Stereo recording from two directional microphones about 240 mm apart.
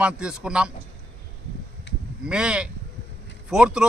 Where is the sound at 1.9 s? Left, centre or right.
Left.